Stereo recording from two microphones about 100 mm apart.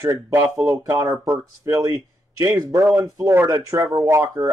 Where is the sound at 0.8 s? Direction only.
40° right (ahead or behind).